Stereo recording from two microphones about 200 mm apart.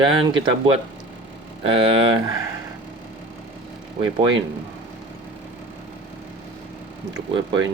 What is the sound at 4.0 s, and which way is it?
Speech, 25° right (ahead or behind).